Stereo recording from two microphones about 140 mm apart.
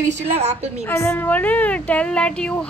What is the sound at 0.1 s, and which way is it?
Speech, 50° right (ahead or behind).